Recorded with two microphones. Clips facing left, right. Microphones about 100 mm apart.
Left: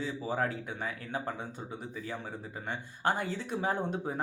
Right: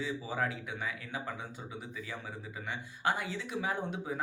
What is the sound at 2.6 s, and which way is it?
Speech, 45° left (ahead or behind).